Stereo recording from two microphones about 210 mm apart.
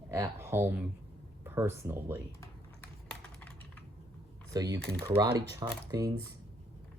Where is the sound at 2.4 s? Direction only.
10° left (ahead or behind).